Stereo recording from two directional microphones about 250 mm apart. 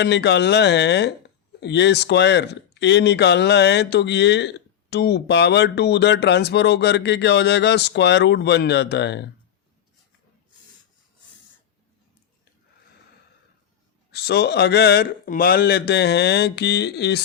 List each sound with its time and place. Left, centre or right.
0.0 s speech: left
14.1 s a man's voice: left